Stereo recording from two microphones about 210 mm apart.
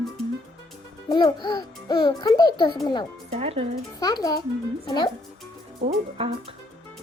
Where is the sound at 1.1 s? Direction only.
20° left (ahead or behind).